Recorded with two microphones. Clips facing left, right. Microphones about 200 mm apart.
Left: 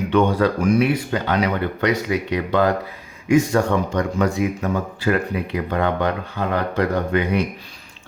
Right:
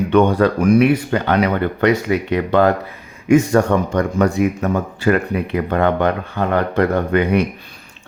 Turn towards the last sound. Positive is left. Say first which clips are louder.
# right 4 dB
turn(degrees=-60)  # may be behind; listen again after turning